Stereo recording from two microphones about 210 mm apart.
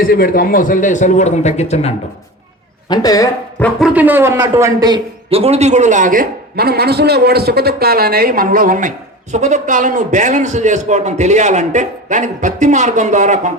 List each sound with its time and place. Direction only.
0.1 s a man's voice: 45° left (ahead or behind)
2.9 s speech: 15° left (ahead or behind)
3.6 s a man's voice: centre (ahead or behind); by 13.5 s 35° right (ahead or behind)